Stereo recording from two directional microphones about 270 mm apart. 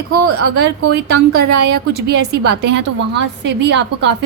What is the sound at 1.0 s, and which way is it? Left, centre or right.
A woman's voice, right.